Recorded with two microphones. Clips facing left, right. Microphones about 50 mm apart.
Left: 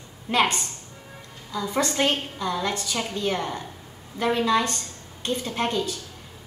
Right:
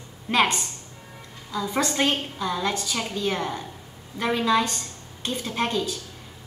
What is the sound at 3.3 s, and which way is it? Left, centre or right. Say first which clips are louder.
Speech: even; centre.